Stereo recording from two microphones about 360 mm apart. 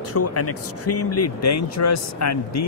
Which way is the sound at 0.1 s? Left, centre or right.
Left.